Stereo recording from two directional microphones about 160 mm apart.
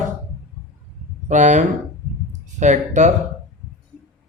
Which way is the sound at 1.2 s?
50° right (ahead or behind).